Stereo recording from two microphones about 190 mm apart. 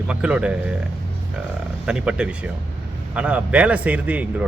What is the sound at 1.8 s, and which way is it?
A man's voice, 5° right (ahead or behind).